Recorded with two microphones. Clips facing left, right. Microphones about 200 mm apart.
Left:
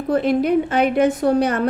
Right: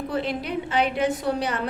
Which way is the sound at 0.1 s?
50° left (ahead or behind).